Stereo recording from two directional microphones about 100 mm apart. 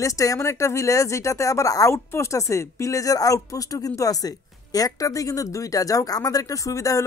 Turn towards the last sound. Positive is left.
turn(degrees=35)  # may be behind; listen again after turning